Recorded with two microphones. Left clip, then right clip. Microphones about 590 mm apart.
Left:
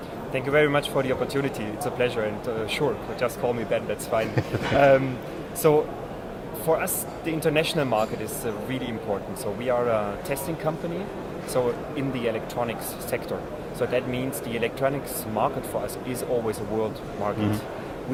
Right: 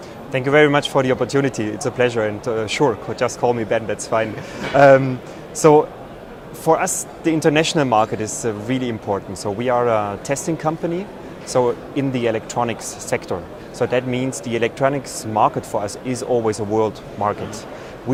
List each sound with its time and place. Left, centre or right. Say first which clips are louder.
0.3 s speech: right 7 dB; right